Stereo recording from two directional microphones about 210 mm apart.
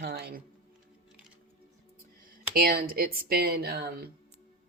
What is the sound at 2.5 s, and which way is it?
A woman's voice, 45° right (ahead or behind).